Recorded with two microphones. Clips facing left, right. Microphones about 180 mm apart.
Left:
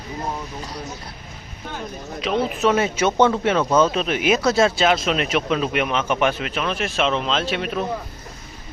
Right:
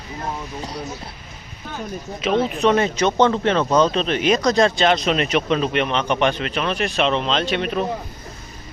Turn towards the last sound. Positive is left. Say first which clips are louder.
# right 2 dB
turn(degrees=0)  # may be behind; listen again after turning